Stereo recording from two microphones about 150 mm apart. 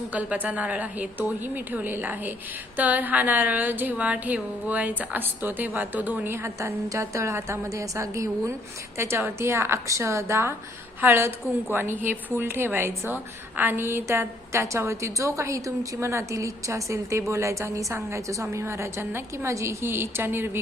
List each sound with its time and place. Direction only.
0.1 s a woman's voice: 10° right (ahead or behind)